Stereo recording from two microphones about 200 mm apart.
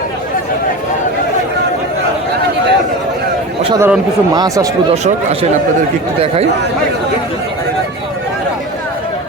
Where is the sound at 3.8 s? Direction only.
15° right (ahead or behind).